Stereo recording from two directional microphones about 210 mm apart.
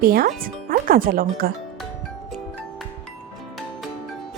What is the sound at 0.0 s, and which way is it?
Speech, 45° right (ahead or behind).